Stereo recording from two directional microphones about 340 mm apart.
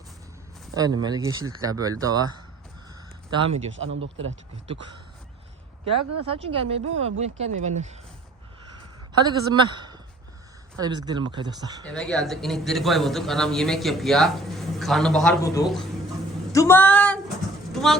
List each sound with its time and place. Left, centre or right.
0.7 s speech: centre
3.7 s speech: right
5.9 s speech: right
6.2 s speech: centre
9.2 s a man's voice: centre
11.9 s a man's voice: centre
16.5 s a sound: centre
17.7 s vehicle: centre